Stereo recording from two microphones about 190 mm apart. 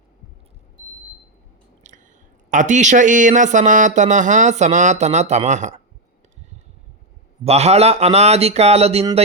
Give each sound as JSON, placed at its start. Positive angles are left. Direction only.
{"t": 2.5, "sound": "speech", "side_deg": -40}
{"t": 7.4, "sound": "speech", "side_deg": -35}